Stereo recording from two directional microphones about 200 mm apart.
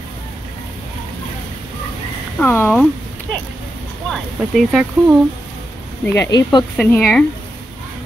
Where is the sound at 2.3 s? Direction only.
10° left (ahead or behind).